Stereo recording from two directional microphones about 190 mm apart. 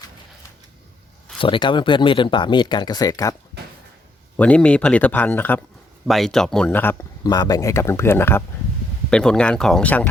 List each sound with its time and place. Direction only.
1.4 s speech: 25° left (ahead or behind)
4.4 s speech: 5° left (ahead or behind)
7.3 s speech: 20° left (ahead or behind)